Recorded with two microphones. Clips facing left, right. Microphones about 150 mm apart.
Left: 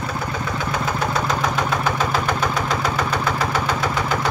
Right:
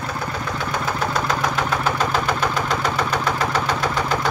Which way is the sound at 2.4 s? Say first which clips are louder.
Even; 10° left (ahead or behind).